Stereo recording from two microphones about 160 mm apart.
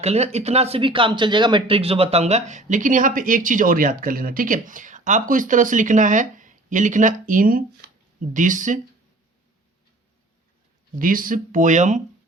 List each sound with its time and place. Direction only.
0.0 s speech: 40° right (ahead or behind); by 7.9 s 65° right (ahead or behind)
8.3 s speech: 50° right (ahead or behind)
11.0 s speech: 60° right (ahead or behind)